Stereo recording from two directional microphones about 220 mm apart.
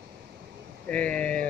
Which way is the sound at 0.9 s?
5° left (ahead or behind).